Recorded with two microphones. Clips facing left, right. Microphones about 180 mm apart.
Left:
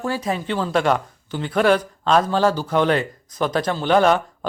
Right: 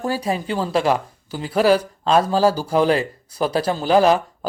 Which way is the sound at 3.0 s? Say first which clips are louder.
Right 2 dB; 10° right (ahead or behind).